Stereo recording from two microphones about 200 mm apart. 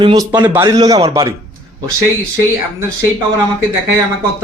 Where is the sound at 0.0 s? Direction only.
20° right (ahead or behind).